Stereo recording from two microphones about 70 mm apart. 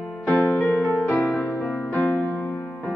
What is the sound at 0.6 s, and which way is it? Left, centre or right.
Music, left.